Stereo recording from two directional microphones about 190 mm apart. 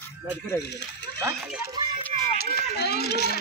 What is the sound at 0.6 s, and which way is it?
Speech, 60° left (ahead or behind).